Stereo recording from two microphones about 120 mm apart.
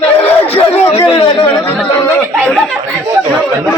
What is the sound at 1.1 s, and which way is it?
Speech, 45° left (ahead or behind).